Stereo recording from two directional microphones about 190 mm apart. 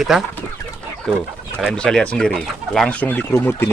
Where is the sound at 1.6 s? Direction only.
Centre (ahead or behind).